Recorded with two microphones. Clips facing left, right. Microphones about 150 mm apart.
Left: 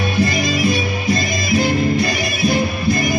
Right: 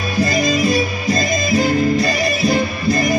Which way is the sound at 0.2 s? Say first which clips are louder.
Right 2 dB; 40° right (ahead or behind).